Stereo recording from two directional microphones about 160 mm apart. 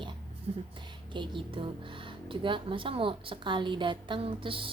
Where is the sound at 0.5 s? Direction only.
40° right (ahead or behind).